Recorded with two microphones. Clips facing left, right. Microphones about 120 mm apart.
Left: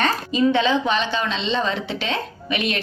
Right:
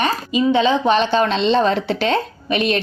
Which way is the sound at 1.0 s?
55° right (ahead or behind).